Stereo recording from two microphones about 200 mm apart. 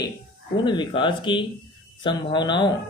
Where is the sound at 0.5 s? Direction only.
25° left (ahead or behind).